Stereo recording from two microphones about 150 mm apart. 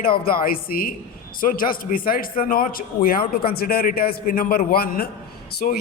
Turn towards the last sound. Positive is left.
turn(degrees=70)  # may be behind; listen again after turning